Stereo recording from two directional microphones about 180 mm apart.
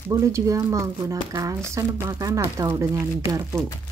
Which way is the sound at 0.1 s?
15° right (ahead or behind).